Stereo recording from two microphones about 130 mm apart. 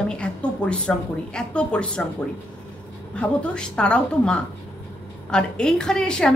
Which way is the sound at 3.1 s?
10° left (ahead or behind).